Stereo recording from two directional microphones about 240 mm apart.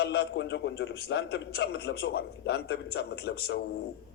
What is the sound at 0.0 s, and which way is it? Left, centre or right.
A man's voice, left.